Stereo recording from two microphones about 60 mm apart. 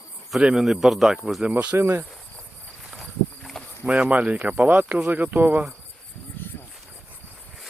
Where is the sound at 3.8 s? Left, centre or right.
Right.